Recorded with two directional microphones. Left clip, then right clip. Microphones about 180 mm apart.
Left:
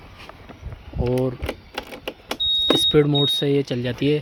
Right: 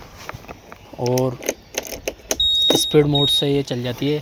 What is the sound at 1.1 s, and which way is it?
Speech, 5° left (ahead or behind).